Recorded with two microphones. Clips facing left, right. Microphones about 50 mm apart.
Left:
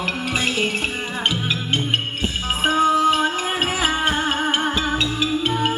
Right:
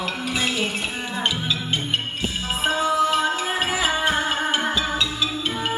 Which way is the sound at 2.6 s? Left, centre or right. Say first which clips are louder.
Left 4 dB; left.